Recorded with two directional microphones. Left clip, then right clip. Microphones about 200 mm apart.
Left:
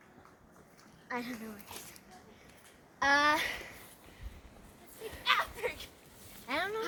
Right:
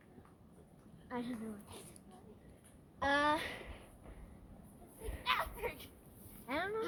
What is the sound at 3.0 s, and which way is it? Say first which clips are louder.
Speech: left 6 dB; centre (ahead or behind).